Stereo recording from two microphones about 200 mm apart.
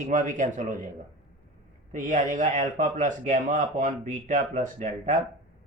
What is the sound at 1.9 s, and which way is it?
Speech, 40° right (ahead or behind).